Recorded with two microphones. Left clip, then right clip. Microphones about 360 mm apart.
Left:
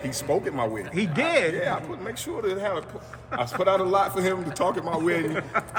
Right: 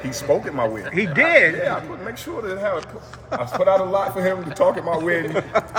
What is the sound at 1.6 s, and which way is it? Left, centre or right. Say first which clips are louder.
Speech: right 4 dB; centre.